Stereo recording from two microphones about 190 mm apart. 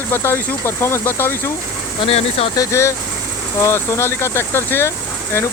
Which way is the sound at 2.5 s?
15° left (ahead or behind).